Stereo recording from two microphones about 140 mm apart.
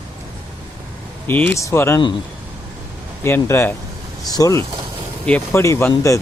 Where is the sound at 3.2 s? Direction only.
20° left (ahead or behind).